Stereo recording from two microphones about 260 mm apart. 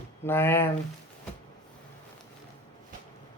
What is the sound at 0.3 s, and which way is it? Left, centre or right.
Speech, centre.